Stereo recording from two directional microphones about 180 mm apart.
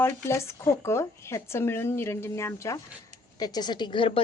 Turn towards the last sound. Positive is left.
turn(degrees=25)  # may be behind; listen again after turning